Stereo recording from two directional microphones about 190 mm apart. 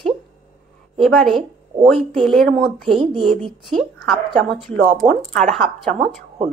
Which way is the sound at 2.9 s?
30° right (ahead or behind).